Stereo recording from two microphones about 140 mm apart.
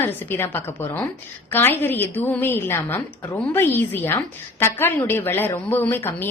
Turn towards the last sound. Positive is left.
turn(degrees=15)  # may be behind; listen again after turning